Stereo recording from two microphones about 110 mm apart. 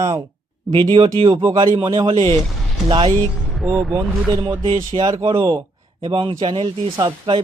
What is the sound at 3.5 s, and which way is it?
Speech, centre (ahead or behind).